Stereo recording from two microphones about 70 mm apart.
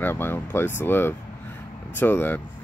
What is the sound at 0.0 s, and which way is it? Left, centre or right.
Speech, left.